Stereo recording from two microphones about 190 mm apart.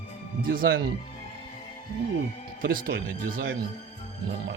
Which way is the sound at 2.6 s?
50° right (ahead or behind).